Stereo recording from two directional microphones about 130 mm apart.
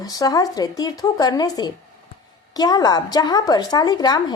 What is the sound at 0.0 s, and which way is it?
A woman's voice, 30° left (ahead or behind).